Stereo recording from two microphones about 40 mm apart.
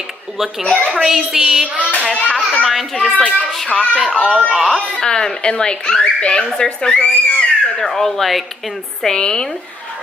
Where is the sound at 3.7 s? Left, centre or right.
Left.